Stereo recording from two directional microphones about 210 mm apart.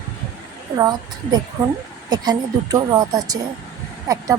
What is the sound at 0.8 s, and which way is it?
A woman's voice, 20° right (ahead or behind).